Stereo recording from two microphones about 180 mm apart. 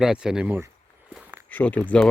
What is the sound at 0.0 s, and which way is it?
Speech, 5° right (ahead or behind).